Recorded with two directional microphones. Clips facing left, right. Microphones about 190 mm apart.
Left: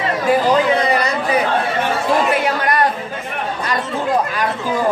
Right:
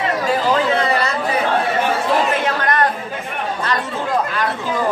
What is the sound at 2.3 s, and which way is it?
Chatter, 10° left (ahead or behind).